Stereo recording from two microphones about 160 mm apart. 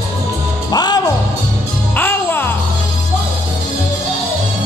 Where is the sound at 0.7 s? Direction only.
25° left (ahead or behind).